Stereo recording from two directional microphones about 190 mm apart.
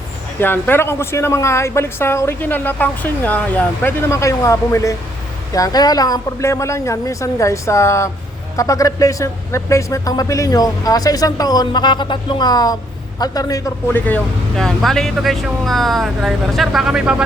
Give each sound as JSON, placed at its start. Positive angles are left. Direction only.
{"t": 0.3, "sound": "speech", "side_deg": 10}